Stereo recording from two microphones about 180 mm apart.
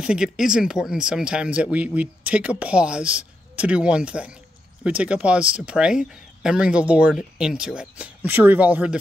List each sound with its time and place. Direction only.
0.0 s speech: 5° right (ahead or behind)